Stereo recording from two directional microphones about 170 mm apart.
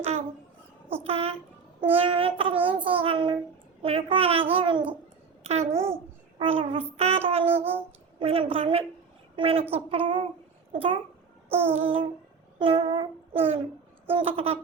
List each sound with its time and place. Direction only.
1.0 s a child's voice: 35° right (ahead or behind)
7.5 s a sound: 10° right (ahead or behind)
8.2 s a woman's voice: 35° right (ahead or behind)
11.4 s child singing: 15° right (ahead or behind)
11.7 s speech: 35° right (ahead or behind)
12.5 s a sound: 30° right (ahead or behind)
14.1 s speech: 35° right (ahead or behind)